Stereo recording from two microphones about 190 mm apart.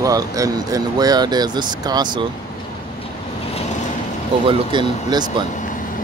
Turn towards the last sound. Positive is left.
turn(degrees=-25)  # may be behind; listen again after turning